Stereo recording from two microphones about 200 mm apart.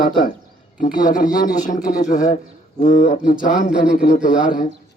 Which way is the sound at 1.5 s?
40° left (ahead or behind).